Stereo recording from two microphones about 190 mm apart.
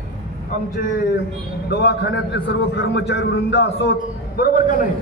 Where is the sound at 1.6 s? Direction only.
60° left (ahead or behind).